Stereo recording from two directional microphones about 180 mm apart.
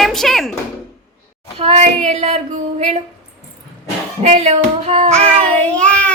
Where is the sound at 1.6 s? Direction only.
35° right (ahead or behind).